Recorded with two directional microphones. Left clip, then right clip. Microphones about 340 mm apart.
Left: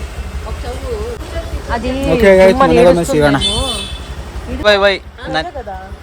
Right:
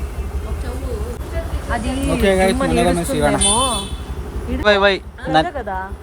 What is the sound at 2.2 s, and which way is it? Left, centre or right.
Speech, centre.